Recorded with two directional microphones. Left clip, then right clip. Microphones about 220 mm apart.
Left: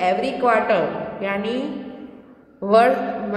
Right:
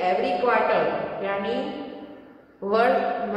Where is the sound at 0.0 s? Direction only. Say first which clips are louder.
Left 3 dB; 50° left (ahead or behind).